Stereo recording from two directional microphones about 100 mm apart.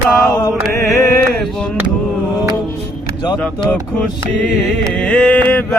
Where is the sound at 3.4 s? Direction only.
5° left (ahead or behind).